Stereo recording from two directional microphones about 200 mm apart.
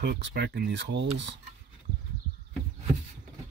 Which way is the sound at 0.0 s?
55° right (ahead or behind).